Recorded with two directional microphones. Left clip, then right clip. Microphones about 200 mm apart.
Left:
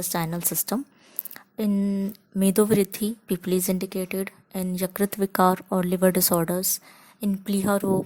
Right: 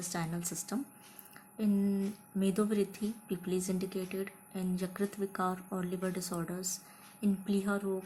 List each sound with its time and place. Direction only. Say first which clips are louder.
0.1 s a woman's voice: left 11 dB; 50° left (ahead or behind)
1.3 s a sound: left 7 dB; 50° left (ahead or behind)
2.4 s a woman's voice: left 11 dB; 50° left (ahead or behind)